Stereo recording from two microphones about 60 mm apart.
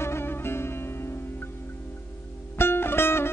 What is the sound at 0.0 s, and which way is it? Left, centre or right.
Music, left.